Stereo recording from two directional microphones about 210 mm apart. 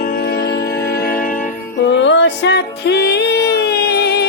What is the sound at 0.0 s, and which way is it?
Music, 45° left (ahead or behind).